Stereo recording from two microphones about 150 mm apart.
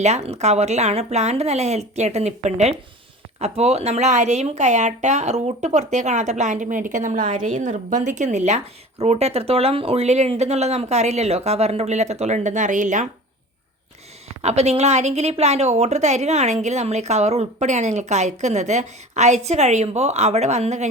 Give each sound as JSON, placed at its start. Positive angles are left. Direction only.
{"t": 0.0, "sound": "speech", "side_deg": -45}
{"t": 14.4, "sound": "speech", "side_deg": -45}